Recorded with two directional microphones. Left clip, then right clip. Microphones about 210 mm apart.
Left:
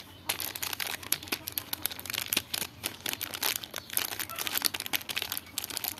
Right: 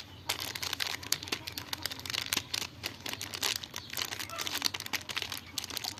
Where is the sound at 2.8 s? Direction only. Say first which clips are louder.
Left 2 dB; 10° left (ahead or behind).